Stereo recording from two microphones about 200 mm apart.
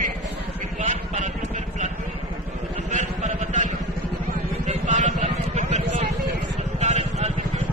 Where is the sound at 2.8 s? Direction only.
35° right (ahead or behind).